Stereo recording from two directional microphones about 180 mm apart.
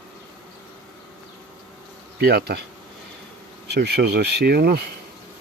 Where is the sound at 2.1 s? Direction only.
65° right (ahead or behind).